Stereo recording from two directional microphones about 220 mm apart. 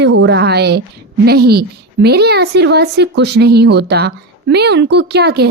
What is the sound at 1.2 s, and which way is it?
A woman's voice, 45° right (ahead or behind).